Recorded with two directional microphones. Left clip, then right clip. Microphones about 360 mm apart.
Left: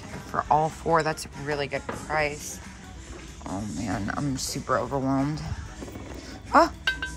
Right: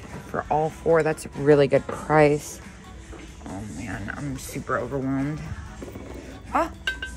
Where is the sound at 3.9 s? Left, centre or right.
Centre.